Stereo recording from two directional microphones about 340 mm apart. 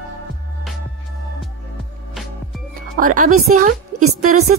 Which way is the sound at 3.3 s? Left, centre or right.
Right.